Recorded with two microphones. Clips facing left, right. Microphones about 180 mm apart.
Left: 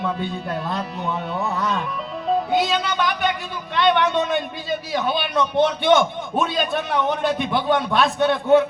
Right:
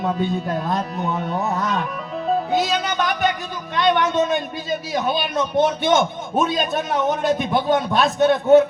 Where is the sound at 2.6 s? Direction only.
45° right (ahead or behind).